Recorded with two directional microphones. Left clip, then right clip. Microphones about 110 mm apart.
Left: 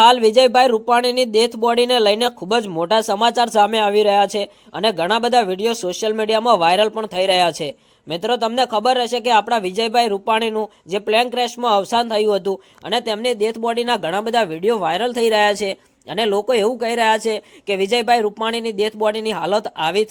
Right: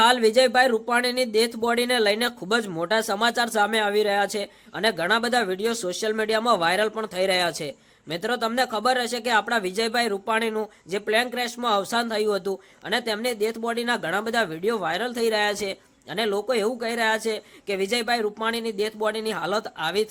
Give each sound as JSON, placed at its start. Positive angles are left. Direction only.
{"t": 0.0, "sound": "speech", "side_deg": 35}